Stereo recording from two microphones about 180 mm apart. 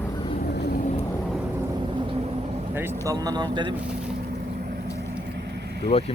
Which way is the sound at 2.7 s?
10° right (ahead or behind).